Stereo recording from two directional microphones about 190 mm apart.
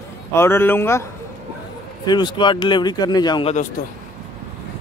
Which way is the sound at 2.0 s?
25° left (ahead or behind).